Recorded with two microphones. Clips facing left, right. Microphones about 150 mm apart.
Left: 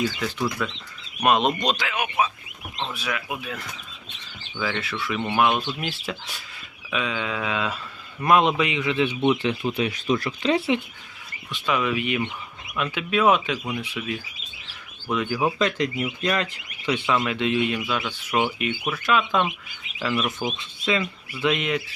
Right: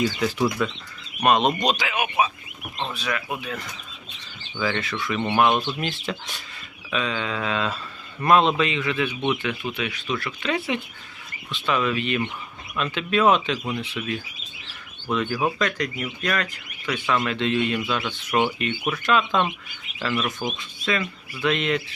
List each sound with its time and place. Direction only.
0.0 s speech: 5° right (ahead or behind)
2.9 s speech: 5° left (ahead or behind)
4.6 s speech: 5° left (ahead or behind); by 9.1 s 20° left (ahead or behind)
9.3 s speech: 30° left (ahead or behind)
11.5 s speech: 10° left (ahead or behind)
15.5 s speech: 25° left (ahead or behind)
17.1 s speech: 10° left (ahead or behind)
20.8 s speech: 20° left (ahead or behind)